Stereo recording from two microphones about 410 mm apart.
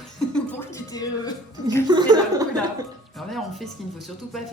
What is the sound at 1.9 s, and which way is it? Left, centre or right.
Speech, centre.